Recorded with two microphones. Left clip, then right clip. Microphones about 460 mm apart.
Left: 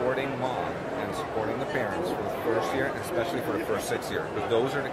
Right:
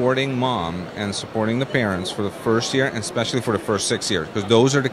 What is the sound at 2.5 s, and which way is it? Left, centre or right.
Speech, right.